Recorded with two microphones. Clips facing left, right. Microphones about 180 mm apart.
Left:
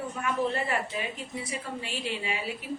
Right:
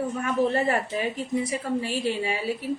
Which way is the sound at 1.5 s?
40° right (ahead or behind).